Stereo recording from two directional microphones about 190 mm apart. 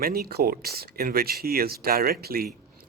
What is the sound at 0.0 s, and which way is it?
Speech, 50° right (ahead or behind).